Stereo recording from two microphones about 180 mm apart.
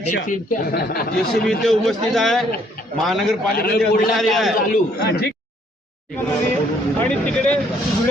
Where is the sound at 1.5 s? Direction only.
Centre (ahead or behind).